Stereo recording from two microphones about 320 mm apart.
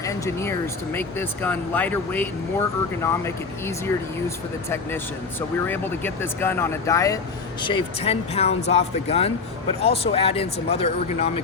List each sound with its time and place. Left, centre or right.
0.0 s speech: centre
5.6 s speech: centre